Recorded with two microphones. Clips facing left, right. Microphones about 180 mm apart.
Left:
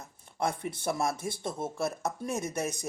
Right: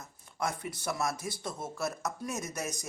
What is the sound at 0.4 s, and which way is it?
Speech, 55° left (ahead or behind).